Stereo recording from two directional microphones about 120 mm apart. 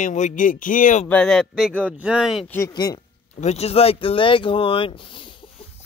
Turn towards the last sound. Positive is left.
turn(degrees=45)  # may be behind; listen again after turning